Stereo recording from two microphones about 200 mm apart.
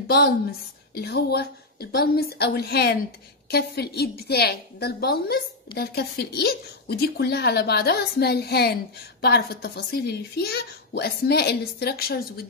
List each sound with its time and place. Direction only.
0.1 s a woman's voice: 50° left (ahead or behind)